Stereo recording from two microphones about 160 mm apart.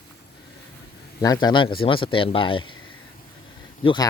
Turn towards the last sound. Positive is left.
turn(degrees=30)  # may be behind; listen again after turning